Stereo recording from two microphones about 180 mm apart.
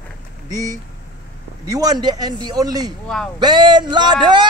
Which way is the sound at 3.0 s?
5° left (ahead or behind).